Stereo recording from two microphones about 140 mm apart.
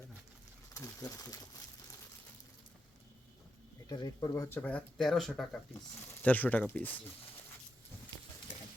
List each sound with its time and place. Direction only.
0.7 s speech: 25° left (ahead or behind)
3.8 s speech: 30° left (ahead or behind)
4.4 s speech: 15° left (ahead or behind)
6.2 s speech: 10° left (ahead or behind)